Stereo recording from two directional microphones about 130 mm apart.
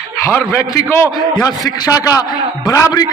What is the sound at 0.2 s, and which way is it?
A man's voice, 25° left (ahead or behind).